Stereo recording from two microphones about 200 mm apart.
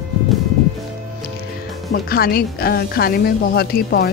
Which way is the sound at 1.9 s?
50° left (ahead or behind).